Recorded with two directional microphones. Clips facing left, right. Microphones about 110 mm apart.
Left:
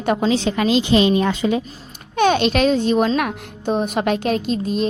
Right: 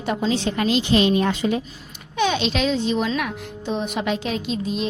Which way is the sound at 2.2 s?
55° left (ahead or behind).